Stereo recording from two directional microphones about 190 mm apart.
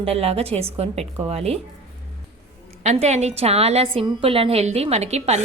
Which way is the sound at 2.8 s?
35° right (ahead or behind).